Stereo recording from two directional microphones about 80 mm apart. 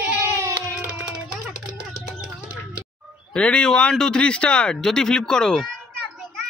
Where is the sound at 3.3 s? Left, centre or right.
Centre.